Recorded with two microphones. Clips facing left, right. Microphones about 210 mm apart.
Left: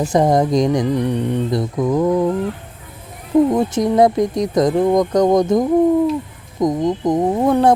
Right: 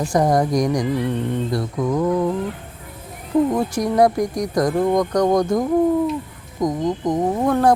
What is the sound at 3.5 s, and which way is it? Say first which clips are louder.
Speech: left 4 dB; 20° left (ahead or behind).